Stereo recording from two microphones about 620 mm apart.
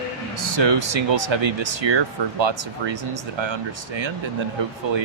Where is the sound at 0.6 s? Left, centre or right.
Right.